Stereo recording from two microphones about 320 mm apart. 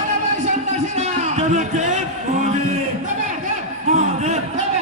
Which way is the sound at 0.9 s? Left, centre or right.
Right.